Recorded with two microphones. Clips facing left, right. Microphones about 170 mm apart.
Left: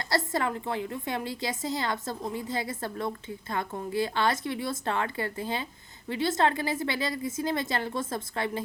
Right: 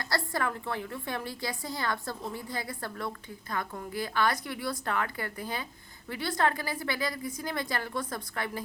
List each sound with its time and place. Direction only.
0.0 s a woman's voice: 20° left (ahead or behind)